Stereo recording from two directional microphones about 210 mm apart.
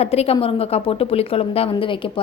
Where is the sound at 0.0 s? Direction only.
30° left (ahead or behind).